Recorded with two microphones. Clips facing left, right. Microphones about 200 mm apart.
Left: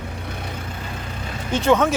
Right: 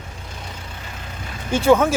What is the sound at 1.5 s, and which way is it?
Speech, 10° right (ahead or behind).